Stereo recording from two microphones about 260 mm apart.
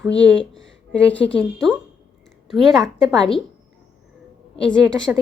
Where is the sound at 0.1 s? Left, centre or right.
Left.